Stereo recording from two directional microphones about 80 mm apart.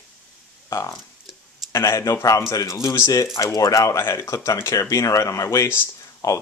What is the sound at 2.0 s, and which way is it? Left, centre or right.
Speech, left.